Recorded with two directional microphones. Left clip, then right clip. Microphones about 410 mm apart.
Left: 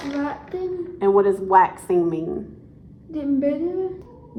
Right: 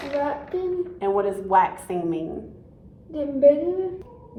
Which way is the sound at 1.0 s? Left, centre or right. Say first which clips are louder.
Left 7 dB; centre.